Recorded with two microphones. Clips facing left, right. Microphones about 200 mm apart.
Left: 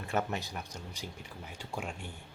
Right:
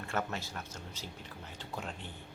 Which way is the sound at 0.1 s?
15° left (ahead or behind).